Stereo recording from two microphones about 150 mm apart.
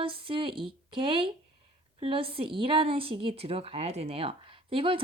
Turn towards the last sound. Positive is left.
turn(degrees=-35)  # may be behind; listen again after turning